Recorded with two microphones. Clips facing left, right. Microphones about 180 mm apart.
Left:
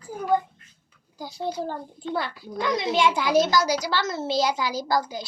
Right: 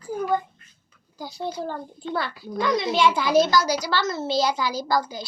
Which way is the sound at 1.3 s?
15° left (ahead or behind).